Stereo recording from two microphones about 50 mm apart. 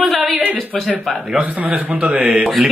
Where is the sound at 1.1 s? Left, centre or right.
Right.